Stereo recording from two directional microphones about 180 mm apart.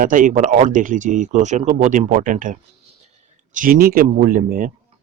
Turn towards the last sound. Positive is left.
turn(degrees=-50)  # may be behind; listen again after turning